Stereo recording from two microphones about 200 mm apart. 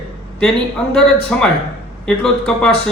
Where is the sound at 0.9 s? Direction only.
5° left (ahead or behind).